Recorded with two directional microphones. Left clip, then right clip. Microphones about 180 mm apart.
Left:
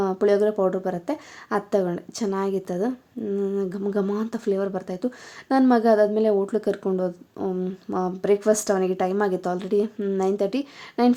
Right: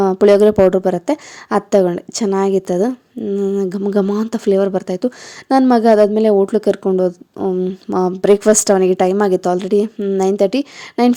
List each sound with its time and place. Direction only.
0.0 s a woman's voice: 45° right (ahead or behind)